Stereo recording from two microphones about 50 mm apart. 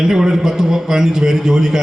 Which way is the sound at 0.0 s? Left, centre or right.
Centre.